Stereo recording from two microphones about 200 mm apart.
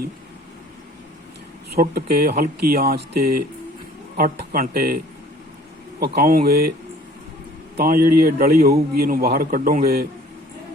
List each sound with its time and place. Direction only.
1.7 s a man's voice: 50° right (ahead or behind)
6.0 s a man's voice: 50° right (ahead or behind)
7.8 s a man's voice: 45° right (ahead or behind)